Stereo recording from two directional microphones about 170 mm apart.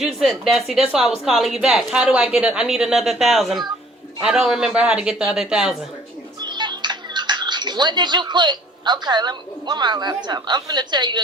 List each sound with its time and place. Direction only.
0.0 s a woman's voice: centre (ahead or behind)
6.4 s a child's voice: 25° right (ahead or behind)